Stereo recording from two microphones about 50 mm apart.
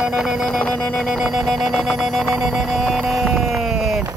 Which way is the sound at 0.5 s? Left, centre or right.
Left.